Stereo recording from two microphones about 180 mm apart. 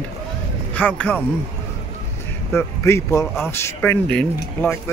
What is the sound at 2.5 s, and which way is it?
A man's voice, 15° left (ahead or behind).